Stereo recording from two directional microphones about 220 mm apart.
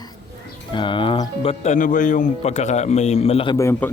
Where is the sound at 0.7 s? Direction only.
20° left (ahead or behind).